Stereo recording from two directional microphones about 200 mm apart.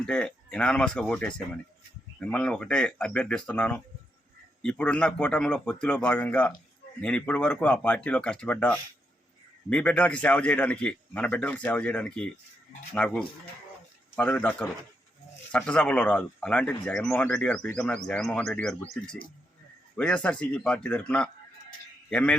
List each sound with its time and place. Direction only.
0.0 s a man's voice: 5° left (ahead or behind)